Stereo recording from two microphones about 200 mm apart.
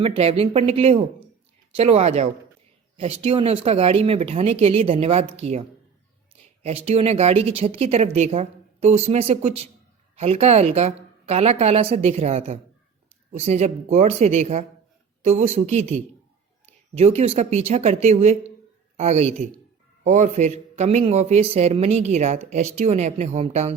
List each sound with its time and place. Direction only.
0.0 s speech: 30° right (ahead or behind)